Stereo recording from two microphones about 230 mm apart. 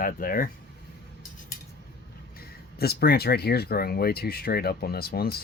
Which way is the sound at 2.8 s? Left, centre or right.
Left.